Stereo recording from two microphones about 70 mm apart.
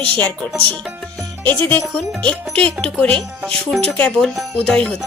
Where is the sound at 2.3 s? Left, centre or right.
Centre.